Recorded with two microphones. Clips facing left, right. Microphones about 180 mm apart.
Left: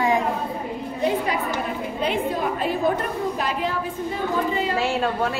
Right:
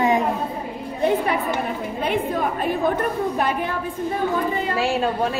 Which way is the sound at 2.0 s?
50° right (ahead or behind).